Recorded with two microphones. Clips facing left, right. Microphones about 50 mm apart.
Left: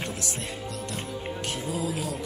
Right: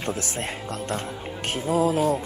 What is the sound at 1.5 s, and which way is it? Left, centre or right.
Speech, right.